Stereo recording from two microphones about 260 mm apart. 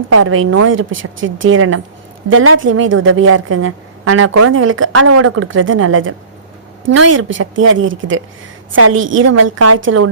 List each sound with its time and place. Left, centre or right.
0.1 s a woman's voice: right